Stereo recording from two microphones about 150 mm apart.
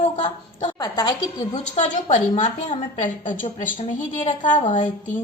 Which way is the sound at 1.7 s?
45° left (ahead or behind).